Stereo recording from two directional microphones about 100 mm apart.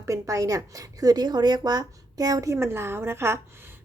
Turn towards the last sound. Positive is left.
turn(degrees=-25)  # may be behind; listen again after turning